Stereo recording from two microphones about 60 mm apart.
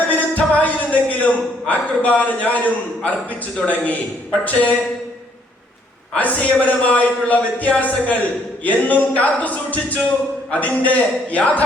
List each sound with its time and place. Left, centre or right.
0.1 s a man's voice: left
6.1 s a man's voice: left